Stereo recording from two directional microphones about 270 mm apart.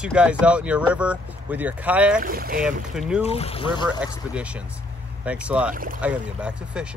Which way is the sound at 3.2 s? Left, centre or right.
Left.